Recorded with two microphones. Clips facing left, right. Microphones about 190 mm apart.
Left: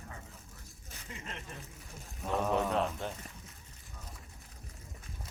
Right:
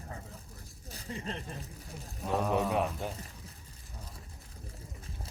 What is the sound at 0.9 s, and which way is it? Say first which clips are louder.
Speech: right 7 dB; 35° right (ahead or behind).